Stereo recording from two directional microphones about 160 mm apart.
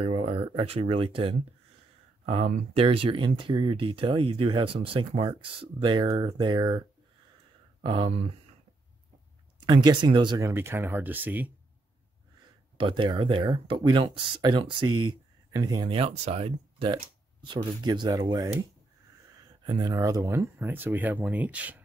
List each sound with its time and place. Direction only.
0.0 s speech: 35° right (ahead or behind)
7.8 s speech: 30° right (ahead or behind)
9.6 s speech: 30° right (ahead or behind); by 11.5 s 10° right (ahead or behind)
12.7 s speech: 30° right (ahead or behind)
17.8 s speech: 25° right (ahead or behind)
19.6 s speech: 25° right (ahead or behind); by 21.8 s 10° right (ahead or behind)